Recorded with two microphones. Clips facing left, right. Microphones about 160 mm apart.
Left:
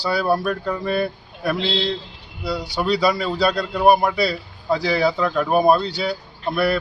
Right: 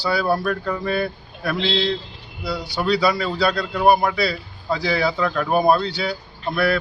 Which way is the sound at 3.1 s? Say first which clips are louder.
Left 1 dB; centre (ahead or behind).